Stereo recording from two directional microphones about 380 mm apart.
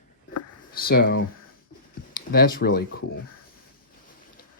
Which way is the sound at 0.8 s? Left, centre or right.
Left.